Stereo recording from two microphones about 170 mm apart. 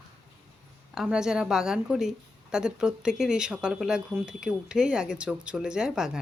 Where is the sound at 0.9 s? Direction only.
5° right (ahead or behind).